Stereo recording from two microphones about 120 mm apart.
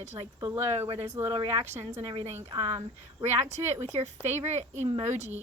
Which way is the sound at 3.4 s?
70° right (ahead or behind).